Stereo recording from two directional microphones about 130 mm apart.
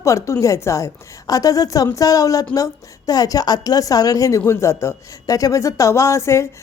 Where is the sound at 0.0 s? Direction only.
25° left (ahead or behind).